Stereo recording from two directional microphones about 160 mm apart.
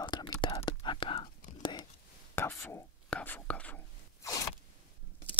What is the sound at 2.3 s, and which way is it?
Whispering, 15° left (ahead or behind).